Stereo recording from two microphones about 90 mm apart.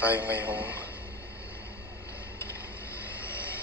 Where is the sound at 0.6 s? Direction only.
30° left (ahead or behind).